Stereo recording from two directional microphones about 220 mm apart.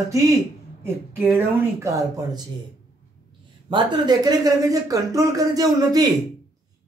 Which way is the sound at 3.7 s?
20° right (ahead or behind).